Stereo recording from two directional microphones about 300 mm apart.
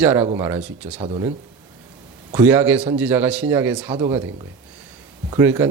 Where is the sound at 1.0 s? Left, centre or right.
Centre.